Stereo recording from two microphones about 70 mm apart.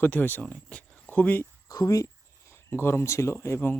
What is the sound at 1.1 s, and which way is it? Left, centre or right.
Speech, left.